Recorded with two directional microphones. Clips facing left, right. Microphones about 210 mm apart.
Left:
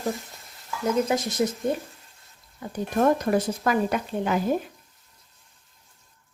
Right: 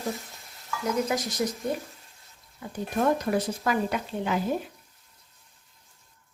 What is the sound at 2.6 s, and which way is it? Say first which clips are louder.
Speech: left 4 dB; 50° left (ahead or behind).